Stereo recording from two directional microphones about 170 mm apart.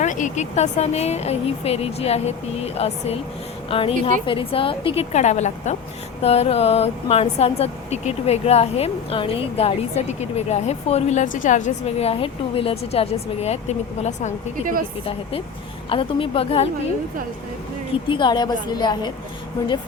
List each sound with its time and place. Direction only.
0.0 s speech: 50° left (ahead or behind)
15.9 s speech: 30° left (ahead or behind)
18.1 s a woman's voice: 25° left (ahead or behind)